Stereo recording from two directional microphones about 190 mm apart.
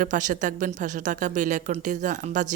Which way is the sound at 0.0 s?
40° right (ahead or behind).